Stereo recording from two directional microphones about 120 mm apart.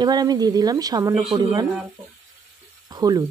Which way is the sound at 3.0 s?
30° right (ahead or behind).